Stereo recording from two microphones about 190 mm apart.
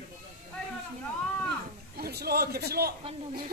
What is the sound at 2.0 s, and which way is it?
Speech, 55° right (ahead or behind).